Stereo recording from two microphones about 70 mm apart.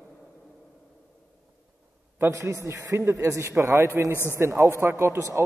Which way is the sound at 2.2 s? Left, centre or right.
Right.